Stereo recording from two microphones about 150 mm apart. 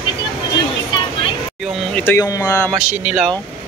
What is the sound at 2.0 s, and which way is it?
Speech, 15° left (ahead or behind).